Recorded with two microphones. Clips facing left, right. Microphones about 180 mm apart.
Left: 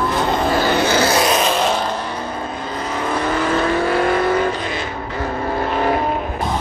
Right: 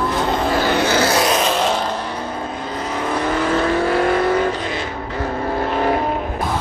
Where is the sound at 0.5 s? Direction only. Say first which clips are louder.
Even; 35° left (ahead or behind).